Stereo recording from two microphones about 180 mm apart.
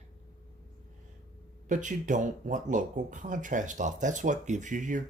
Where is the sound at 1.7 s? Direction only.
45° right (ahead or behind).